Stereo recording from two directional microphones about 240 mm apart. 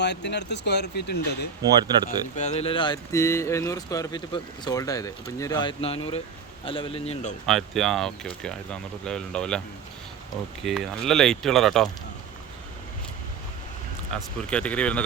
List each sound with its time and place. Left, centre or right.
0.0 s speech: left
2.3 s speech: left
7.4 s speech: centre
10.6 s speech: centre
14.5 s speech: centre